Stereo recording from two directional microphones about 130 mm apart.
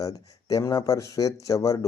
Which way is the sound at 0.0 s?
25° left (ahead or behind).